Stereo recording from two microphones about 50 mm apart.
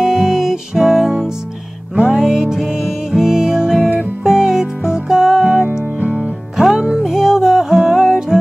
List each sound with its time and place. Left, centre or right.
0.0 s music: centre
5.9 s music: right
6.5 s music: centre